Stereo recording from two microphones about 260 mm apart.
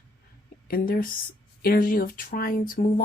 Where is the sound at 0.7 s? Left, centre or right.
Left.